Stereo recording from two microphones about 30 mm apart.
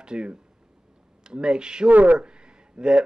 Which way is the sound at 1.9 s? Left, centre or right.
Right.